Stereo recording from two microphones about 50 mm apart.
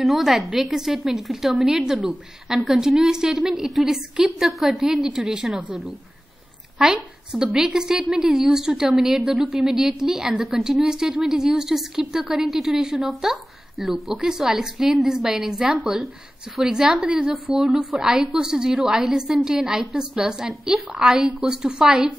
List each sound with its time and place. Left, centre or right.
0.0 s a woman's voice: centre
3.5 s a woman's voice: centre
6.8 s a woman's voice: centre
17.0 s a woman's voice: right